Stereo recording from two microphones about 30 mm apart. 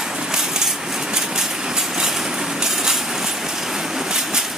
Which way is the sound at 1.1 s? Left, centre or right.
Centre.